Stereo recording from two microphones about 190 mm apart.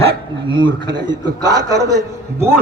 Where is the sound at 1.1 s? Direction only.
20° right (ahead or behind).